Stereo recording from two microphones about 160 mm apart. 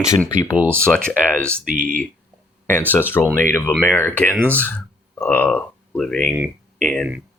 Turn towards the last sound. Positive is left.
turn(degrees=5)  # may be behind; listen again after turning